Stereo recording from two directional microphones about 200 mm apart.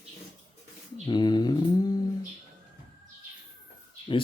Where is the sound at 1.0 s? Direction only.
20° left (ahead or behind).